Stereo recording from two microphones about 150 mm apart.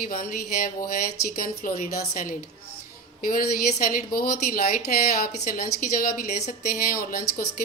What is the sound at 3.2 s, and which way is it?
Speech, 70° left (ahead or behind).